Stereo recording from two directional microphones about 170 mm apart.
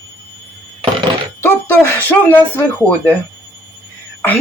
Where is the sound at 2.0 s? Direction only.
10° left (ahead or behind).